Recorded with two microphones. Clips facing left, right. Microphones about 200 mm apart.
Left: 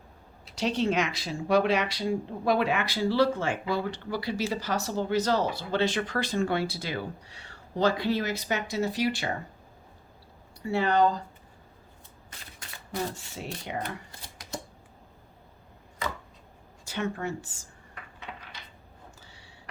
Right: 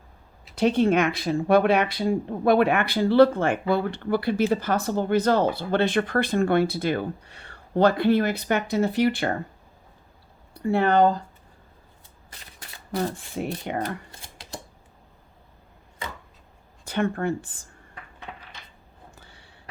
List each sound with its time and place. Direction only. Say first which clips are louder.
0.5 s speech: right 7 dB; 55° right (ahead or behind)
10.5 s speech: right 5 dB; 55° right (ahead or behind)
12.9 s speech: right 6 dB; 55° right (ahead or behind)
16.8 s speech: right 6 dB; 55° right (ahead or behind)
19.2 s a sound: right 1 dB; 55° right (ahead or behind)